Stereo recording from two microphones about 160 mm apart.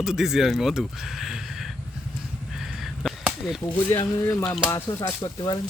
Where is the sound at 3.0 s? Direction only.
10° right (ahead or behind).